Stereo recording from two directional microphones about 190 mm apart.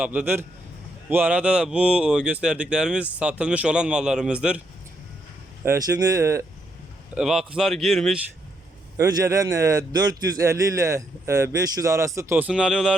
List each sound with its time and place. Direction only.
0.0 s a man's voice: 5° right (ahead or behind)
5.6 s a man's voice: 15° right (ahead or behind)
7.1 s speech: 5° right (ahead or behind)
9.0 s a man's voice: 20° right (ahead or behind); by 12.9 s centre (ahead or behind)